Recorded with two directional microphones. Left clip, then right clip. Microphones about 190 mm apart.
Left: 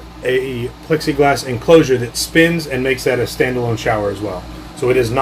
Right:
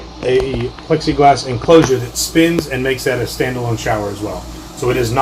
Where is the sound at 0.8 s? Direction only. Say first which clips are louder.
Right 3 dB; centre (ahead or behind).